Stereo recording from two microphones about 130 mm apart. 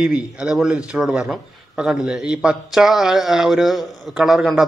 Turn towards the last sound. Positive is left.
turn(degrees=0)  # may be behind; listen again after turning